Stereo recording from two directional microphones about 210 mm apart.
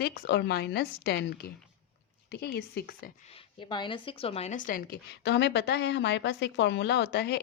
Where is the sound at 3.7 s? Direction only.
20° left (ahead or behind); by 7.4 s 50° left (ahead or behind).